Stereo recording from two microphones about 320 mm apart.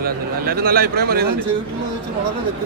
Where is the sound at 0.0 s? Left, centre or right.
Right.